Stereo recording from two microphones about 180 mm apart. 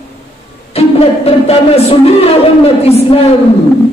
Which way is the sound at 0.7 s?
35° left (ahead or behind).